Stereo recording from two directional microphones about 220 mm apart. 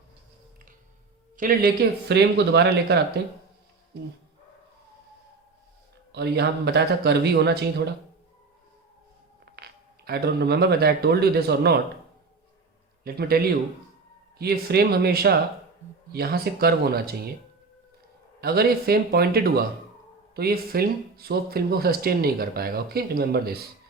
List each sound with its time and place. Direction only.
1.4 s speech: 40° right (ahead or behind)
6.1 s speech: 50° right (ahead or behind)
9.6 s speech: 45° right (ahead or behind)
13.1 s speech: 45° right (ahead or behind)
18.3 s speech: 45° right (ahead or behind)